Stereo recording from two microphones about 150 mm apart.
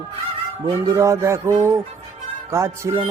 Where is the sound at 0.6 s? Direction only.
20° right (ahead or behind).